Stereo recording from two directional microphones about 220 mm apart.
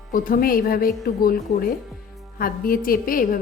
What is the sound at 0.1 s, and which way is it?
A woman's voice, 40° left (ahead or behind).